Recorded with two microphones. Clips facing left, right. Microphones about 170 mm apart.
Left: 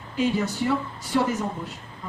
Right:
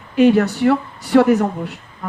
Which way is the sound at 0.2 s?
65° right (ahead or behind).